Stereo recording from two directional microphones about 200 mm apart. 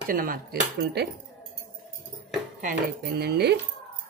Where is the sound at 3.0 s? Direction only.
55° right (ahead or behind).